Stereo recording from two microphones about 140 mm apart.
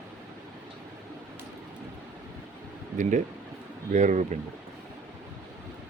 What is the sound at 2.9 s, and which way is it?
Speech, 65° right (ahead or behind).